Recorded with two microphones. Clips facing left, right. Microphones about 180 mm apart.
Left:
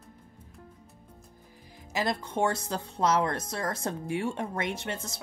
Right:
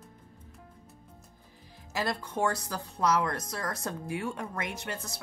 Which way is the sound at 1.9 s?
20° left (ahead or behind).